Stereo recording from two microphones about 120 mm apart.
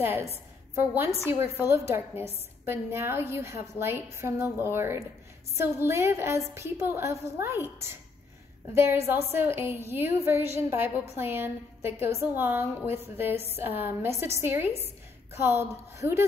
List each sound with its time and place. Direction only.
0.0 s a woman's voice: 20° right (ahead or behind)